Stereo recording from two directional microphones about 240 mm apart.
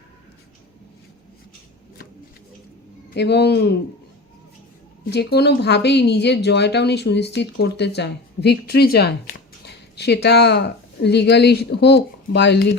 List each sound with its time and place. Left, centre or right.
3.1 s speech: left
5.0 s speech: left